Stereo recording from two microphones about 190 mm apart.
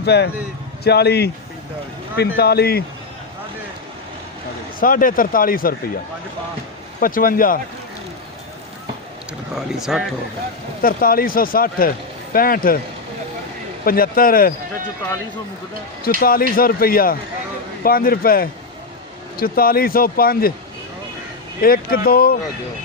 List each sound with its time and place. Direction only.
0.0 s speech: 60° left (ahead or behind)
4.8 s speech: 45° left (ahead or behind)
7.0 s speech: 45° left (ahead or behind)
9.6 s speech: 5° right (ahead or behind)
10.8 s speech: 50° left (ahead or behind)
13.8 s speech: 50° left (ahead or behind)
16.2 s speech: 50° left (ahead or behind)
21.6 s speech: 50° left (ahead or behind)